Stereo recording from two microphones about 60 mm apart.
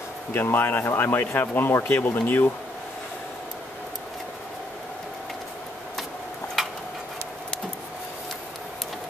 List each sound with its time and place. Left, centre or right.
0.3 s speech: left